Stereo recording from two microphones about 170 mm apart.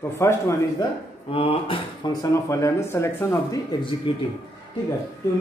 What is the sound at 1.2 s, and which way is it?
Speech, 35° left (ahead or behind).